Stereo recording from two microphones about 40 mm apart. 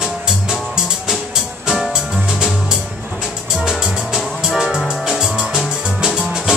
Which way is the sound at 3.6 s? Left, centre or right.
Centre.